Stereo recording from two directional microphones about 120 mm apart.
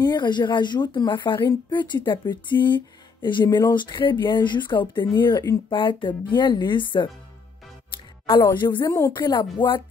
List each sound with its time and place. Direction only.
0.0 s speech: 35° left (ahead or behind)
7.9 s music: 45° left (ahead or behind)
8.5 s speech: 40° left (ahead or behind)
8.8 s speech: 30° left (ahead or behind)
9.2 s speech: 40° left (ahead or behind)